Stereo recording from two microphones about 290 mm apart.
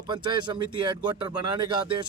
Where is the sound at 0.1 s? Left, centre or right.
Centre.